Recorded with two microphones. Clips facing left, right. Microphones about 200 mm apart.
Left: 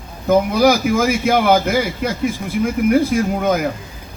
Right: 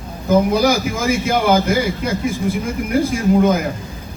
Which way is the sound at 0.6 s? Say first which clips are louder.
Left 3 dB; 55° left (ahead or behind).